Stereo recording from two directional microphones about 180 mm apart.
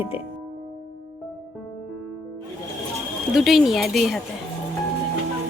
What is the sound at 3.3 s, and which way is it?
Speech, centre (ahead or behind).